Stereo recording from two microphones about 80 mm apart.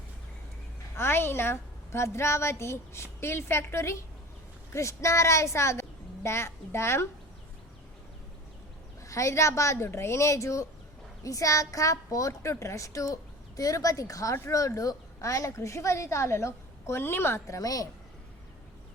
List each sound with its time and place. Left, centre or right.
0.9 s a woman's voice: left
9.0 s a woman's voice: left